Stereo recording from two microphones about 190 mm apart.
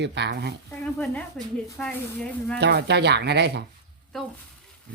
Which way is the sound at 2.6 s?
65° right (ahead or behind).